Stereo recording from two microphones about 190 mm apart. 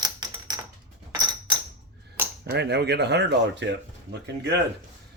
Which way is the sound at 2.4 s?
60° right (ahead or behind).